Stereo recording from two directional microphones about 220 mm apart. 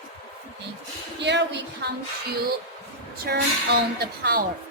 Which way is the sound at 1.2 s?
50° right (ahead or behind).